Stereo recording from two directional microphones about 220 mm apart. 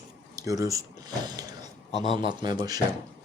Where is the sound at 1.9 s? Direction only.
30° left (ahead or behind).